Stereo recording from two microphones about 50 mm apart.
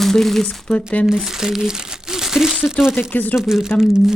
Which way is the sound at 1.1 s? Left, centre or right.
Centre.